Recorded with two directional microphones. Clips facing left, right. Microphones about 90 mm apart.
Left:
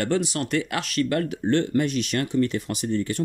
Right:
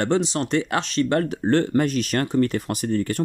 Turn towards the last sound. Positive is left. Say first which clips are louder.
# right 2 dB
turn(degrees=-45)  # may be behind; listen again after turning